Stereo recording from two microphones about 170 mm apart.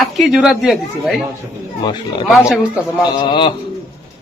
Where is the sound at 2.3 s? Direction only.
Centre (ahead or behind).